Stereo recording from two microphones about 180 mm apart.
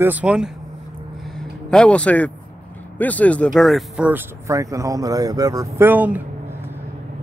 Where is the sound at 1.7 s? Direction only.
5° left (ahead or behind).